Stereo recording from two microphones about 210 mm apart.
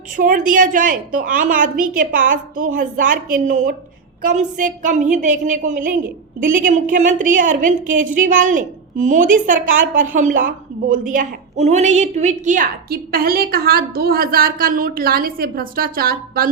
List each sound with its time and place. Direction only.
0.2 s a woman's voice: 40° right (ahead or behind)